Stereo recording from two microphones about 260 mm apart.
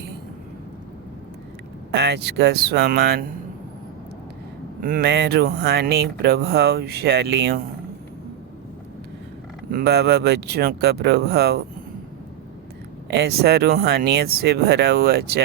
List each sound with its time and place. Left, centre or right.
1.9 s speech: right
4.8 s speech: right
9.7 s speech: right
13.1 s speech: right